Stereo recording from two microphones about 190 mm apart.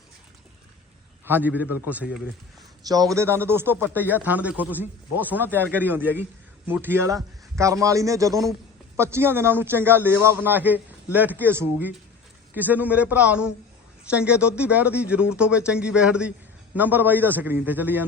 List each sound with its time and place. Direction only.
1.2 s speech: 10° right (ahead or behind)
2.8 s speech: 20° right (ahead or behind)